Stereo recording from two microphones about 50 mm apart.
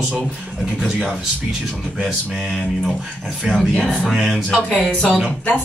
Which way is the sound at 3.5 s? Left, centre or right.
Centre.